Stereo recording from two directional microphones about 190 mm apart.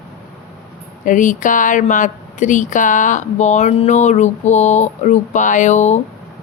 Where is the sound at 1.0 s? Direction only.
45° left (ahead or behind).